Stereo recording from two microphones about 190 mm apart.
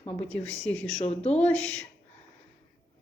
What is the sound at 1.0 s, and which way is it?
Speech, 35° left (ahead or behind).